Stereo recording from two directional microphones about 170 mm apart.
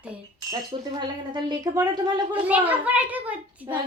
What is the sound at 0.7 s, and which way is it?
A woman's voice, 25° right (ahead or behind).